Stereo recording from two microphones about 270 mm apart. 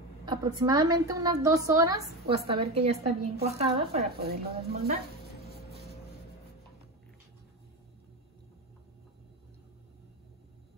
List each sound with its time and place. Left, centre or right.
0.2 s a woman's voice: centre
4.2 s speech: right